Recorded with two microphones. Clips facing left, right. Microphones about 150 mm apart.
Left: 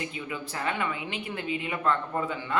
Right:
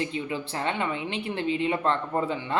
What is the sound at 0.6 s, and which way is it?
Speech, 25° right (ahead or behind).